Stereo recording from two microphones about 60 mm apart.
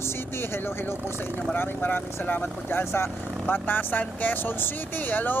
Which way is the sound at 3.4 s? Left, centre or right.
Left.